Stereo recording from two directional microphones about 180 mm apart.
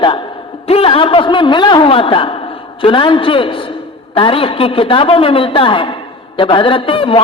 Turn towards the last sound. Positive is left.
turn(degrees=30)  # may be behind; listen again after turning